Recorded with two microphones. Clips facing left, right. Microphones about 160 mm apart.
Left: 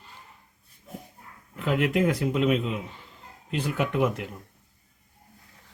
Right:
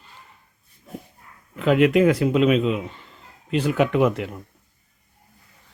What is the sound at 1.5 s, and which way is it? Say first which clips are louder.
Speech: right 8 dB; 90° right.